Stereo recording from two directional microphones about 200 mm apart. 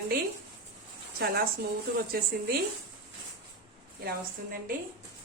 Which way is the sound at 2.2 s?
50° right (ahead or behind).